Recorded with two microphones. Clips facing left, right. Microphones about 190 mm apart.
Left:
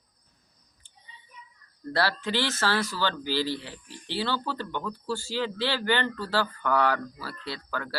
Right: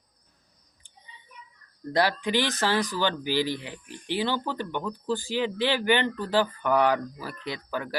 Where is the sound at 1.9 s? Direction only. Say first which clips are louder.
Right 3 dB; 15° right (ahead or behind).